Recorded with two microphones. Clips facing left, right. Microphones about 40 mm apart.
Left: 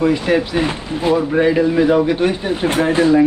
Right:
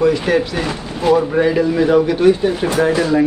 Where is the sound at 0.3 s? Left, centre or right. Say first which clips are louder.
Left 1 dB; left.